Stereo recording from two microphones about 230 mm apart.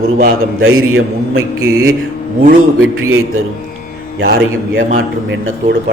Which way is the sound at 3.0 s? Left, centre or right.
Right.